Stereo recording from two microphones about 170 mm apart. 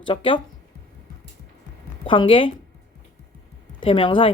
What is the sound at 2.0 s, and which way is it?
Speech, 30° left (ahead or behind).